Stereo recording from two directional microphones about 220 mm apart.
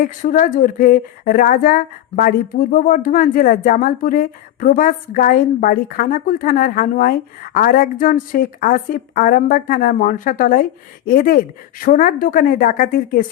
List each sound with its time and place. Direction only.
0.0 s a woman's voice: 35° left (ahead or behind)